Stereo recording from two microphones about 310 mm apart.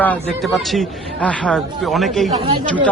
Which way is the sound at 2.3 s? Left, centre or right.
Centre.